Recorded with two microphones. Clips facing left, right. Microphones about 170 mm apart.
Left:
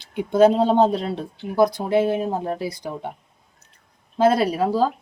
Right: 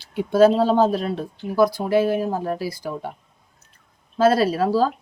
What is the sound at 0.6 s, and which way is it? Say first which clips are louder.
Speech: even; 20° left (ahead or behind).